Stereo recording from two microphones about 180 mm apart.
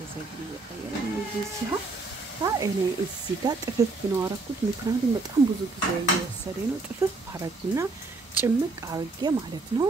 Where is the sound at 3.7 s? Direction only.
15° right (ahead or behind).